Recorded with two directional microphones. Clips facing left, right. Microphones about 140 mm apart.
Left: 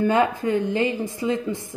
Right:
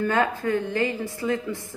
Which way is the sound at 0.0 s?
15° left (ahead or behind).